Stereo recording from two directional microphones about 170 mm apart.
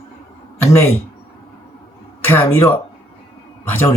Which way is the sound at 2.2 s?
15° left (ahead or behind).